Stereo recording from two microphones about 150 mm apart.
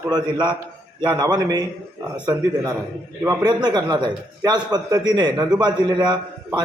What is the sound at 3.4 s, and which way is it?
A man's voice, 30° right (ahead or behind).